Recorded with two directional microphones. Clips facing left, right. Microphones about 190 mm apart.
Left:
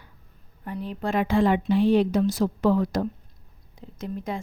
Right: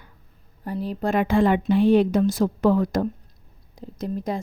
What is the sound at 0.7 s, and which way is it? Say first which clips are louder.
A woman's voice: right 4 dB; 35° right (ahead or behind).